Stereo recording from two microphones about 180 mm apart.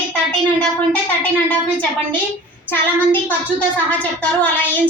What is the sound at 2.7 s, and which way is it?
Speech, 10° left (ahead or behind).